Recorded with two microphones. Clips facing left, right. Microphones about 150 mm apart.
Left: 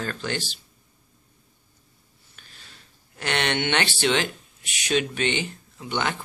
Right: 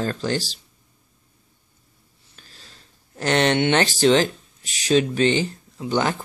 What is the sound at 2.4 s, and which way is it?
Speech, 35° right (ahead or behind).